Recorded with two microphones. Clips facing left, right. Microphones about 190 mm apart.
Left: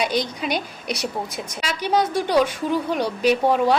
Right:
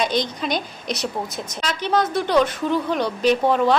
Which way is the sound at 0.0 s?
10° left (ahead or behind).